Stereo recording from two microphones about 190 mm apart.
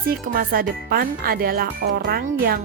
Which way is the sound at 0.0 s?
50° right (ahead or behind).